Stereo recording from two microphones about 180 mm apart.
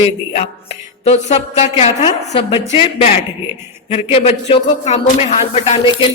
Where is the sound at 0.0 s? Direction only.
35° left (ahead or behind).